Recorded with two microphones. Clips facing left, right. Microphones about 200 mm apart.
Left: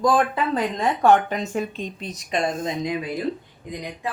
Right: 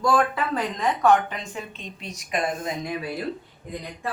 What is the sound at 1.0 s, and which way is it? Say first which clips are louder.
A woman's voice: left 3 dB; 35° left (ahead or behind).